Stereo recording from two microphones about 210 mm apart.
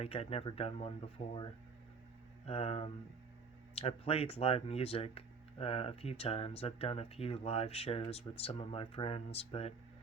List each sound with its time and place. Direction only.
0.0 s speech: 30° left (ahead or behind)
2.5 s speech: 30° left (ahead or behind)